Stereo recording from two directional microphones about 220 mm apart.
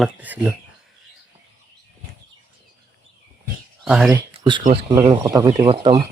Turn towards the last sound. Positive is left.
turn(degrees=-20)  # may be behind; listen again after turning